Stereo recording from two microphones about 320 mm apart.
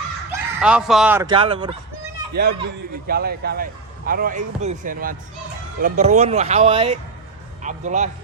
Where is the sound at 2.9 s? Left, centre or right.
Right.